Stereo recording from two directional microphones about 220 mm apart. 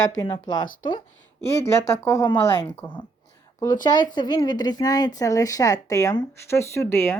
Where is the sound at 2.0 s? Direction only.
15° left (ahead or behind).